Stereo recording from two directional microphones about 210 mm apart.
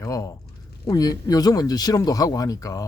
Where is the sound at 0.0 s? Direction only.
15° left (ahead or behind).